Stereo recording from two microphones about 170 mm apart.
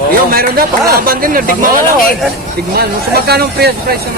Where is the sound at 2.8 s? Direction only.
65° right (ahead or behind).